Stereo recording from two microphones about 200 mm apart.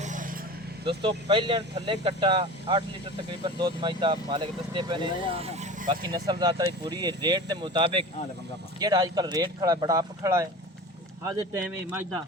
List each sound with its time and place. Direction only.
0.0 s vehicle: 40° right (ahead or behind)
0.9 s speech: 25° right (ahead or behind)
6.1 s speech: 20° right (ahead or behind)